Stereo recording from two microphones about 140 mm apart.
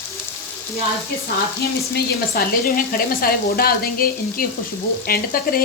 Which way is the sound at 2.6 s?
90° left.